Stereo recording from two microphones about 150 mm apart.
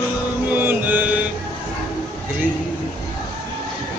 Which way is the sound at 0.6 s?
10° right (ahead or behind).